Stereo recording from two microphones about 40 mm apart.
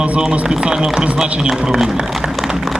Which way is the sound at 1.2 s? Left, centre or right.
Right.